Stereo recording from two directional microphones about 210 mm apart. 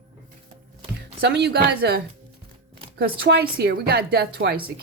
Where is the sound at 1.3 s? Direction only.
50° right (ahead or behind).